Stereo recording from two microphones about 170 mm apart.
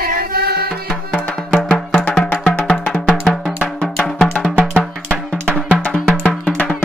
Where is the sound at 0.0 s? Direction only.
60° right (ahead or behind).